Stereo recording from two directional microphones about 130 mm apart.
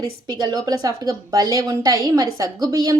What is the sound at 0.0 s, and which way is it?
A woman's voice, 35° right (ahead or behind).